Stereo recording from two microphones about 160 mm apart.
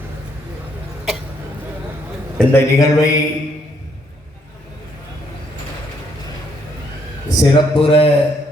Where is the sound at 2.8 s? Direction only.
20° left (ahead or behind).